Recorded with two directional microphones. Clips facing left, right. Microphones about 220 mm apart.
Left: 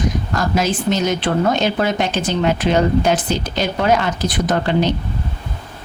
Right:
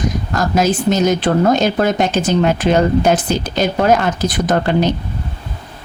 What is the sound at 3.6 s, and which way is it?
Speech, 45° right (ahead or behind).